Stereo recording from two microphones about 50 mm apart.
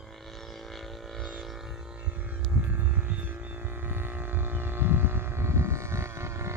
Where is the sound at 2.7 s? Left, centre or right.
Right.